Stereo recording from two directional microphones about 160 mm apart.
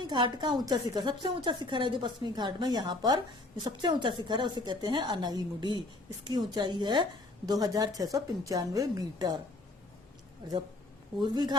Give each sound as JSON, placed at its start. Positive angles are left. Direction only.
{"t": 0.0, "sound": "a woman's voice", "side_deg": -30}
{"t": 10.4, "sound": "a woman's voice", "side_deg": -25}